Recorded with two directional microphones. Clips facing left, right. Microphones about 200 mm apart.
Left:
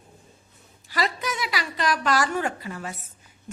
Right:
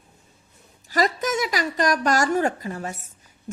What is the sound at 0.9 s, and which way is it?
A woman's voice, 45° right (ahead or behind).